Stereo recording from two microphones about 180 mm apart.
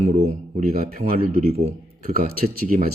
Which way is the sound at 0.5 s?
55° right (ahead or behind).